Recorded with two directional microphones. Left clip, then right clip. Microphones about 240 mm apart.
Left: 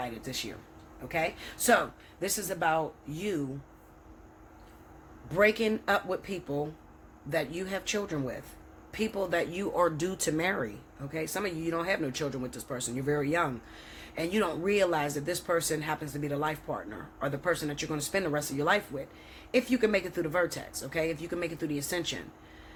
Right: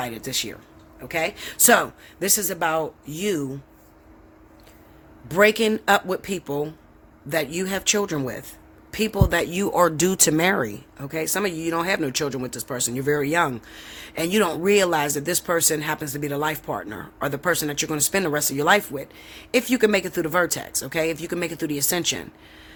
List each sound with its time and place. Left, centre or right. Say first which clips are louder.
0.0 s speech: right 9 dB; right
5.3 s speech: right 8 dB; right